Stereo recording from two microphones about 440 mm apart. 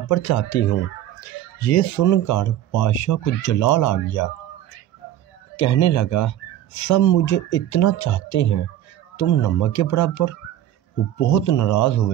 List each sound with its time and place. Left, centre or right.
0.1 s speech: left
5.6 s speech: left